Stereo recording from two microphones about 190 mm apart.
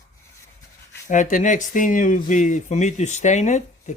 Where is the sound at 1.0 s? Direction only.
45° left (ahead or behind).